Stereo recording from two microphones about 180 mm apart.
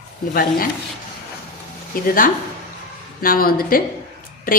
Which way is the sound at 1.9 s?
50° left (ahead or behind).